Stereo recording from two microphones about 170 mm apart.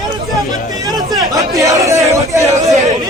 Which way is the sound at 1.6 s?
20° right (ahead or behind).